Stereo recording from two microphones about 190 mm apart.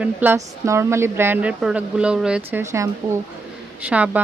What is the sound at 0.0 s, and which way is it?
A woman's voice, 10° right (ahead or behind).